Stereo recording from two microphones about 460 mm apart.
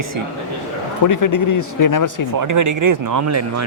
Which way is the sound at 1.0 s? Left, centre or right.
Left.